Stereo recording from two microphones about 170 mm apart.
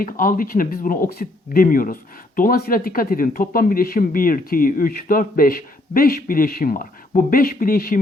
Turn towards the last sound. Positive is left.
turn(degrees=60)  # may be behind; listen again after turning